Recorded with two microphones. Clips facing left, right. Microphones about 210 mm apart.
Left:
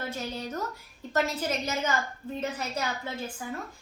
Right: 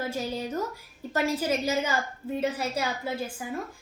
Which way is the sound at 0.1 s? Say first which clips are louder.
Right 4 dB; 10° right (ahead or behind).